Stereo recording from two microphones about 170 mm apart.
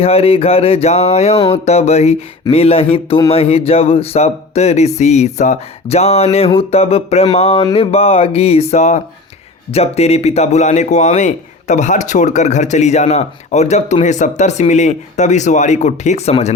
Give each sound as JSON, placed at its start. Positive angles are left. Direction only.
{"t": 0.0, "sound": "speech", "side_deg": 35}